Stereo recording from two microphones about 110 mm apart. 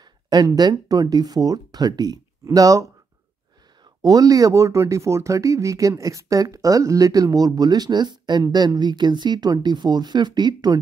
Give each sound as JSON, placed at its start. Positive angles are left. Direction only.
{"t": 0.0, "sound": "speech", "side_deg": -35}